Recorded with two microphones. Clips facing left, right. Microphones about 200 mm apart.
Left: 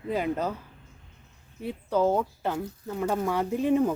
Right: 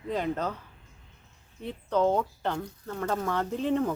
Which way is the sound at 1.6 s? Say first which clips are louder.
Left 1 dB; 5° left (ahead or behind).